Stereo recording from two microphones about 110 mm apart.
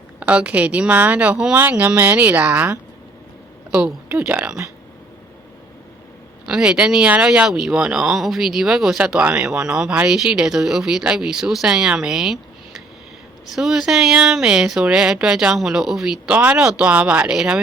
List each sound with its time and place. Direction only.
0.2 s speech: 10° right (ahead or behind)
6.4 s speech: 5° right (ahead or behind)
13.6 s speech: 5° right (ahead or behind)